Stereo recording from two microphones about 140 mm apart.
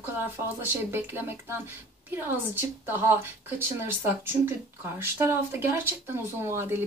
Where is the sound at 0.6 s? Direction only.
15° right (ahead or behind).